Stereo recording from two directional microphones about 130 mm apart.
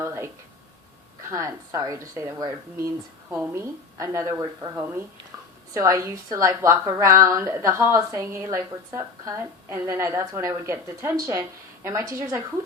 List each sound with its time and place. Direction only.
0.0 s a sound: 20° right (ahead or behind)
1.3 s a woman's voice: 25° right (ahead or behind)
3.9 s a woman's voice: 25° right (ahead or behind)